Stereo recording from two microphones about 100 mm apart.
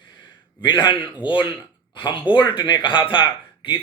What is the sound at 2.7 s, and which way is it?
Speech, 50° left (ahead or behind).